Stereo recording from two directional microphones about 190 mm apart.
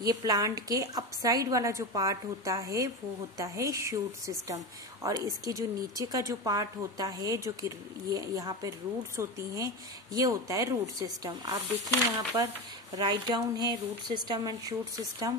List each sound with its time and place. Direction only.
0.0 s a woman's voice: 20° right (ahead or behind)